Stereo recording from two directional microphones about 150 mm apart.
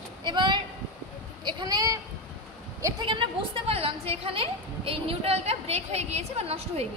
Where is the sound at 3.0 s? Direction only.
35° right (ahead or behind).